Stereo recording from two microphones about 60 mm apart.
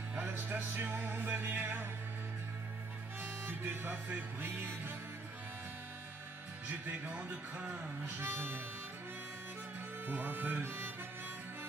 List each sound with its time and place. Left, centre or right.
0.3 s music: right
3.2 s music: right
6.7 s music: right
8.0 s harmonica: right
10.0 s music: right
10.6 s harmonica: right